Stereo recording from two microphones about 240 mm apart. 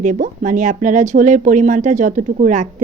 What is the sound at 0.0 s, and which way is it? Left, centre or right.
Speech, right.